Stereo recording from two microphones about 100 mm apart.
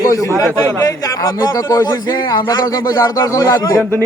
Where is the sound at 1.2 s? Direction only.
35° left (ahead or behind).